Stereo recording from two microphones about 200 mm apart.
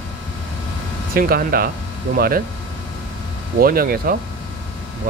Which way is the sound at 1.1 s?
50° right (ahead or behind).